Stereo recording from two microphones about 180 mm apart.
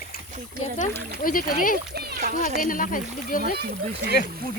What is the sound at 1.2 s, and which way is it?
Speech, 50° left (ahead or behind).